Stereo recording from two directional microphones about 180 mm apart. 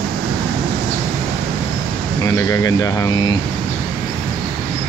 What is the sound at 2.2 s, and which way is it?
Speech, 20° left (ahead or behind).